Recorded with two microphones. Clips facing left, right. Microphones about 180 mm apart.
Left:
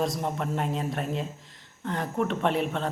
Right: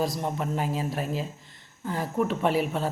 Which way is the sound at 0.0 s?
Centre (ahead or behind).